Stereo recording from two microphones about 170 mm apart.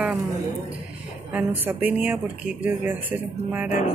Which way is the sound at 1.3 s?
10° right (ahead or behind).